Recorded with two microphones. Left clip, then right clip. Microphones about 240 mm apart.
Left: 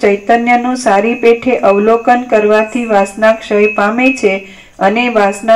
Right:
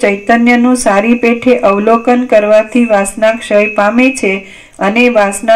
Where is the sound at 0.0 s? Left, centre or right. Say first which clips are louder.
Even; right.